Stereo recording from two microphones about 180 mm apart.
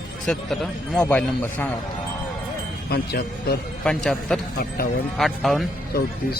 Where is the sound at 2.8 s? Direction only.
65° left (ahead or behind).